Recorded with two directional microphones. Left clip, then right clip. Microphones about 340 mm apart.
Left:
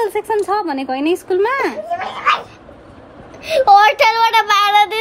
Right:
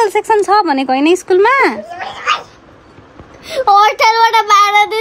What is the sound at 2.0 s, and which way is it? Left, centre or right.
Babbling, left.